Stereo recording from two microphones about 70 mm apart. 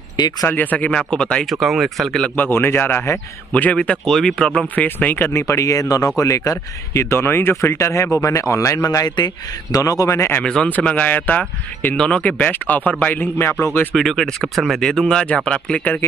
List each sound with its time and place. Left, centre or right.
0.5 s speech: left
0.9 s speech: centre
1.4 s speech: centre
2.3 s speech: left; by 4.6 s centre
4.7 s speech: left
5.3 s speech: left
7.7 s speech: left
10.4 s speech: centre; by 13.7 s left
13.9 s speech: centre